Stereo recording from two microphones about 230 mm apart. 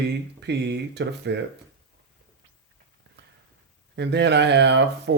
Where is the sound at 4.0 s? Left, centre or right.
Right.